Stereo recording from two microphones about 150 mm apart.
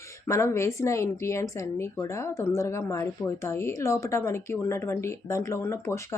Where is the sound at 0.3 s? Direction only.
20° left (ahead or behind).